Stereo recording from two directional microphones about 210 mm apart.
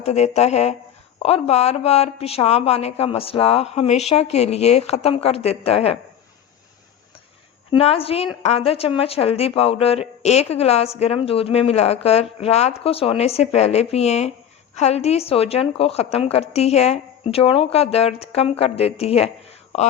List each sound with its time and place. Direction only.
0.0 s speech: 30° left (ahead or behind)
7.7 s speech: 25° left (ahead or behind)